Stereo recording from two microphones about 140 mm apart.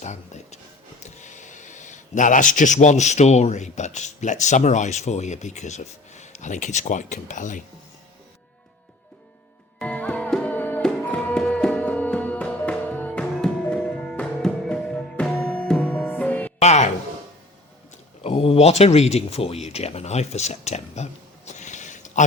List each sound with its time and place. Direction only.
0.0 s a sound: 55° left (ahead or behind)
1.0 s speech: 60° left (ahead or behind)
9.7 s music: 10° left (ahead or behind)
16.6 s music: 55° left (ahead or behind)
18.2 s speech: 45° left (ahead or behind); by 22.2 s 60° left (ahead or behind)